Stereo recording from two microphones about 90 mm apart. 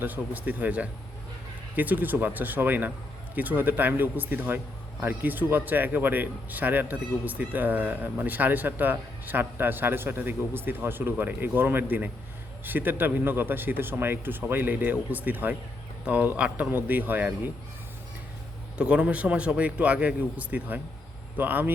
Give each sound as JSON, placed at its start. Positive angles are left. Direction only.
{"t": 0.0, "sound": "a man's voice", "side_deg": -20}
{"t": 18.8, "sound": "a man's voice", "side_deg": -15}